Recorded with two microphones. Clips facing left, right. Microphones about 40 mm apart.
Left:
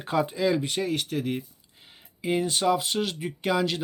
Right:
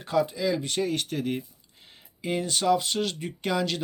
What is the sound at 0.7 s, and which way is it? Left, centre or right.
Speech, centre.